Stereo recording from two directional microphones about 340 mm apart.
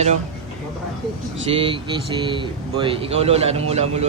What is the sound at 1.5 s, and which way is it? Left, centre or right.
Speech, centre.